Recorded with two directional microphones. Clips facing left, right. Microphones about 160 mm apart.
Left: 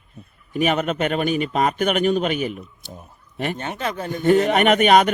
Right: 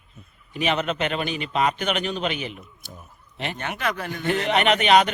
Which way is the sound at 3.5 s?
30° left (ahead or behind).